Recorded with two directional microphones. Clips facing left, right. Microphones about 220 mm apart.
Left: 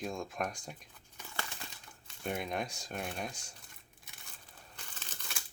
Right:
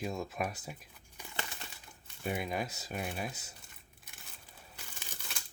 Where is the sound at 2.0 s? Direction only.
5° right (ahead or behind).